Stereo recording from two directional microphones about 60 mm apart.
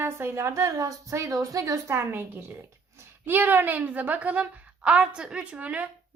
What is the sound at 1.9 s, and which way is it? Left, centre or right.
A woman's voice, right.